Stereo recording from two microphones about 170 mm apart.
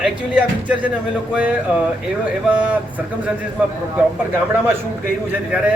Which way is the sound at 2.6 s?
10° right (ahead or behind).